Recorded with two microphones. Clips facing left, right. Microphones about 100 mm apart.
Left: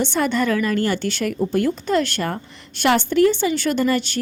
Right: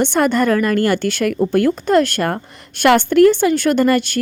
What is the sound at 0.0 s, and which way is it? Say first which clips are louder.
A woman's voice: right 5 dB; 55° right (ahead or behind).